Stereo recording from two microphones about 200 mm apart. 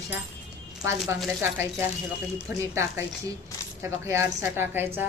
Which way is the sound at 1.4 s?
10° right (ahead or behind).